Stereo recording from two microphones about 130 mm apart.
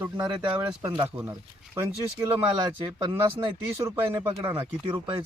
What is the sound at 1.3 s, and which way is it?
Speech, 25° right (ahead or behind).